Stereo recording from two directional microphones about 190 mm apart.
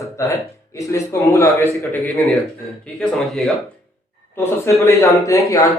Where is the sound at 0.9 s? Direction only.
15° left (ahead or behind).